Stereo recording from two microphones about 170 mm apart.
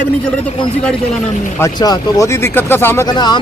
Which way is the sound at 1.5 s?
20° left (ahead or behind).